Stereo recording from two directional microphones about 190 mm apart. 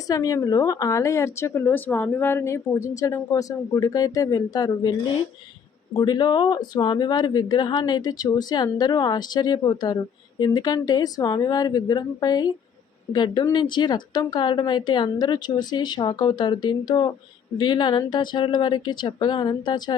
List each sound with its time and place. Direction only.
0.1 s a woman's voice: 20° left (ahead or behind)
6.0 s speech: 25° left (ahead or behind)